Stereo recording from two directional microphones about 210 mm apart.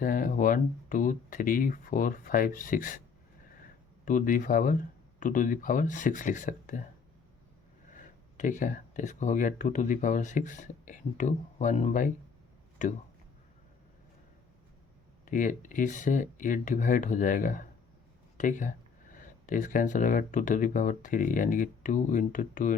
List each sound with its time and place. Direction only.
0.0 s speech: 40° left (ahead or behind)
4.0 s speech: 40° left (ahead or behind)
8.4 s speech: 35° left (ahead or behind)
15.2 s speech: 40° left (ahead or behind)